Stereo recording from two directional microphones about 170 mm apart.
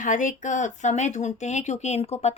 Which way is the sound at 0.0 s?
50° left (ahead or behind).